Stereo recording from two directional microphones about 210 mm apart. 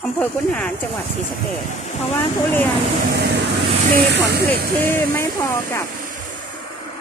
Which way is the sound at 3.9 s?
50° right (ahead or behind).